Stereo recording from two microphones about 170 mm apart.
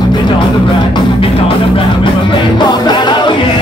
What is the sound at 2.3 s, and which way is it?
Music, 25° left (ahead or behind).